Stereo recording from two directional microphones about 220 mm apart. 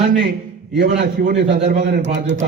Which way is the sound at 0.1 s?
50° right (ahead or behind).